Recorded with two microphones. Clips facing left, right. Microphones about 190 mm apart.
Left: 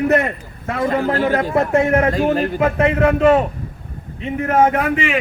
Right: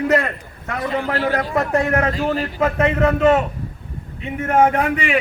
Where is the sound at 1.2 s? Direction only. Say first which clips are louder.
Left 3 dB; 20° left (ahead or behind).